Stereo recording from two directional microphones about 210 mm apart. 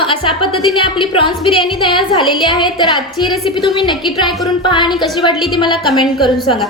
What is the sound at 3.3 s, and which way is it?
Speech, centre (ahead or behind).